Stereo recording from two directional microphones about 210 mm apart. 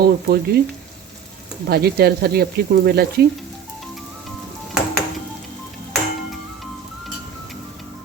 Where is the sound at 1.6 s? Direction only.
50° right (ahead or behind).